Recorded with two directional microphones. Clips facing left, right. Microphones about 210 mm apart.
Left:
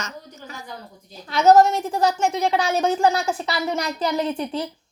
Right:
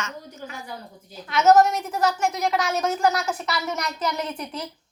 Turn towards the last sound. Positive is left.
turn(degrees=30)  # may be behind; listen again after turning